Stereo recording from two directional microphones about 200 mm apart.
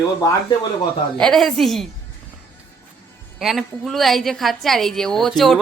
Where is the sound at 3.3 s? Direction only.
Centre (ahead or behind).